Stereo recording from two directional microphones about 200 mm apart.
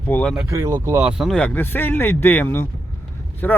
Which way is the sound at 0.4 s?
15° right (ahead or behind).